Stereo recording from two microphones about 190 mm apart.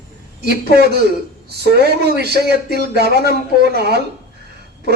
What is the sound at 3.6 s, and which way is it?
Speech, 60° right (ahead or behind).